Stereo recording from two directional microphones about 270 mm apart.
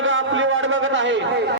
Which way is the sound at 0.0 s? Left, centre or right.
Right.